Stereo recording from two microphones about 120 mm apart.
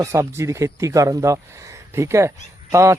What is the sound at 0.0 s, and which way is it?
Speech, 25° right (ahead or behind).